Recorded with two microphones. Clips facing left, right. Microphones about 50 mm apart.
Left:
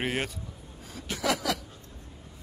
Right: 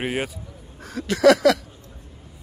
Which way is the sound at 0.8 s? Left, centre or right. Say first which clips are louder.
Right 14 dB; right.